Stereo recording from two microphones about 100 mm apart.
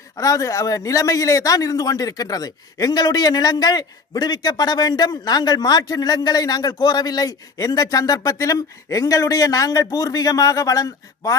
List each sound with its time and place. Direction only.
0.2 s speech: 35° left (ahead or behind)